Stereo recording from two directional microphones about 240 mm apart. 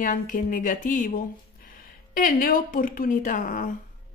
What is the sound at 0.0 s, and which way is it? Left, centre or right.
Speech, left.